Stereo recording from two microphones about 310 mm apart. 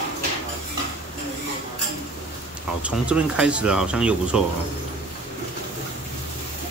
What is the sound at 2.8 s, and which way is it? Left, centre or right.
Speech, centre.